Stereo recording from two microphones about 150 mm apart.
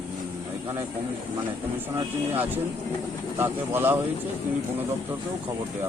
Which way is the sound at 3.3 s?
15° right (ahead or behind).